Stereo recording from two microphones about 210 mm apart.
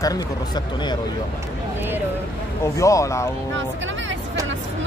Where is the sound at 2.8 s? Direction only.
15° left (ahead or behind).